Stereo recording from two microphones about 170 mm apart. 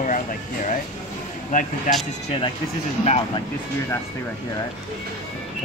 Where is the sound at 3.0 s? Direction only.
35° left (ahead or behind).